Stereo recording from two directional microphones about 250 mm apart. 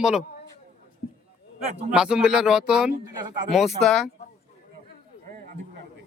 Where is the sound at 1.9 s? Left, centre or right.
Centre.